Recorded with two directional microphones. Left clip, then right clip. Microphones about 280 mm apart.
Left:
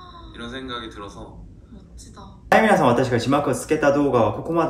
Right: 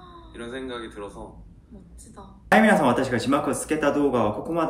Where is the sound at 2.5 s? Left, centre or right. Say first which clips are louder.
Left 2 dB; centre.